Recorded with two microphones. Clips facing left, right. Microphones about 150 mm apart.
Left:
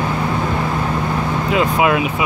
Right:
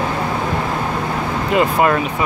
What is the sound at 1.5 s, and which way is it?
Vehicle, 5° left (ahead or behind).